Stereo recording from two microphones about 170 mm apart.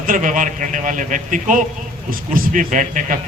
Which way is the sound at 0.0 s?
50° right (ahead or behind).